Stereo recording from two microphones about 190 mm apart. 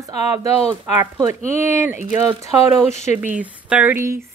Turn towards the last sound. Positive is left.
turn(degrees=-15)  # may be behind; listen again after turning